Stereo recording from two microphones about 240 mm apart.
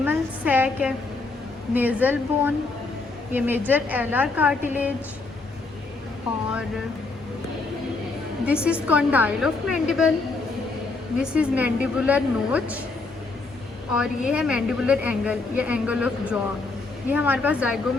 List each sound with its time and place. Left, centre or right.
0.0 s a woman's voice: centre
6.3 s a woman's voice: centre
8.4 s a woman's voice: centre
11.2 s a woman's voice: centre
13.9 s a woman's voice: centre